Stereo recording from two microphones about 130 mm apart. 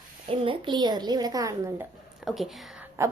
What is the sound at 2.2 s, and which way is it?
Speech, centre (ahead or behind).